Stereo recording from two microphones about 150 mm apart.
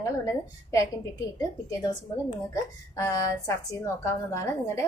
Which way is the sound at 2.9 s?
20° left (ahead or behind).